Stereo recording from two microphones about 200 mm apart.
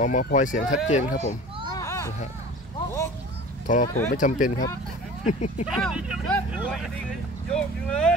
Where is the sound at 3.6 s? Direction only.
40° left (ahead or behind).